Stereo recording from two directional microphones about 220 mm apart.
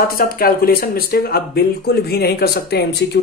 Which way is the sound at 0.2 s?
40° left (ahead or behind).